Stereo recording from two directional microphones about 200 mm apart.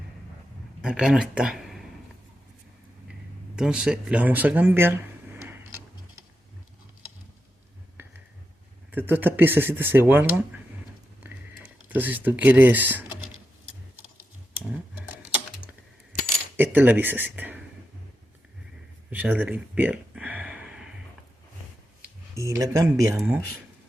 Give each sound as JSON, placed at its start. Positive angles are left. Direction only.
{"t": 0.8, "sound": "speech", "side_deg": -5}
{"t": 3.5, "sound": "speech", "side_deg": -5}
{"t": 8.0, "sound": "a sound", "side_deg": -10}
{"t": 8.9, "sound": "speech", "side_deg": -10}
{"t": 11.9, "sound": "speech", "side_deg": -10}
{"t": 16.7, "sound": "speech", "side_deg": -10}
{"t": 19.1, "sound": "a sound", "side_deg": -10}
{"t": 22.0, "sound": "speech", "side_deg": -15}